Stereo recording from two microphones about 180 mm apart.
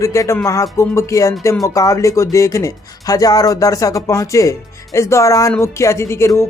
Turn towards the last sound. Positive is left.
turn(degrees=15)  # may be behind; listen again after turning